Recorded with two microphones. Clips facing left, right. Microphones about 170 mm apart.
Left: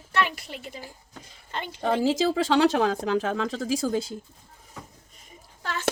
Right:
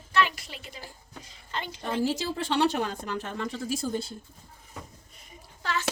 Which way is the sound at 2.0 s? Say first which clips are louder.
Left 4 dB; 90° left.